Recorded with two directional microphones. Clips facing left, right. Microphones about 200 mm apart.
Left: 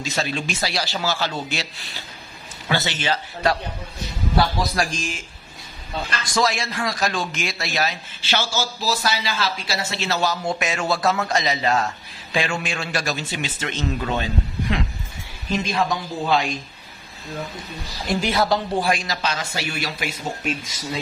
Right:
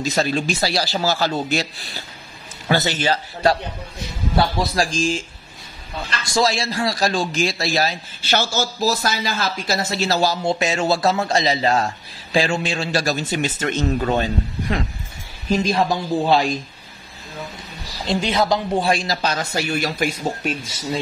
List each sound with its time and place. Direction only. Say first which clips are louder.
0.0 s a man's voice: right 5 dB; 40° right (ahead or behind)
6.2 s a man's voice: right 3 dB; 30° right (ahead or behind)
18.0 s a man's voice: right 2 dB; 20° right (ahead or behind); by 20.5 s 45° right (ahead or behind)